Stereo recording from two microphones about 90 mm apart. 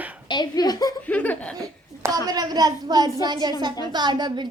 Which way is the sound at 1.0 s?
15° left (ahead or behind).